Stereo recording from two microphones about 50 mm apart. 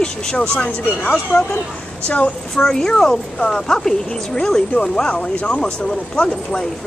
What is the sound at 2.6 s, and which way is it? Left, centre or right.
Speech, centre.